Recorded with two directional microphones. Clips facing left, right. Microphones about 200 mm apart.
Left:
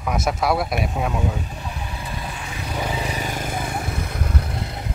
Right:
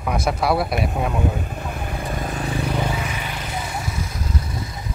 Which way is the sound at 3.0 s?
40° left (ahead or behind).